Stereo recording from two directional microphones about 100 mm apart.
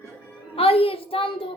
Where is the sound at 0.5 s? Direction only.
70° left (ahead or behind).